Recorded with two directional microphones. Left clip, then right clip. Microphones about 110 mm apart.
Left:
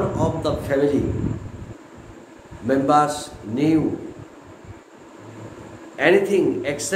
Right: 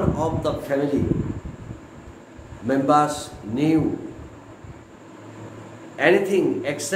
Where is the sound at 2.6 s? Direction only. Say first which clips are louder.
Left 1 dB; 5° right (ahead or behind); by 3.8 s 20° right (ahead or behind).